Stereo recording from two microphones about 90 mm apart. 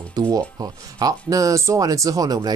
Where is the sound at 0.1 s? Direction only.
45° right (ahead or behind).